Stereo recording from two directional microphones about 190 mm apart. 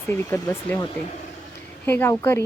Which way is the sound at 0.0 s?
15° left (ahead or behind).